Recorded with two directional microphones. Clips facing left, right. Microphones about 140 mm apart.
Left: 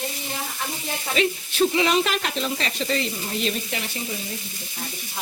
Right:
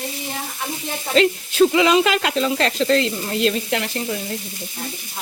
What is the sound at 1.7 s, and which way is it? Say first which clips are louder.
Speech: right 5 dB; 90° right.